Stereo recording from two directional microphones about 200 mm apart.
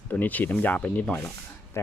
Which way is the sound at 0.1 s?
10° left (ahead or behind).